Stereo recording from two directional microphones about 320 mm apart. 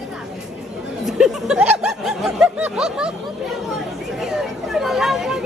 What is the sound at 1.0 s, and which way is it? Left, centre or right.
Speech, centre.